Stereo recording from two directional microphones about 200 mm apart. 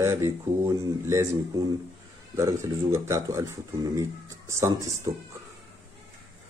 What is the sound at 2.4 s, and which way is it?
Speech, 15° right (ahead or behind).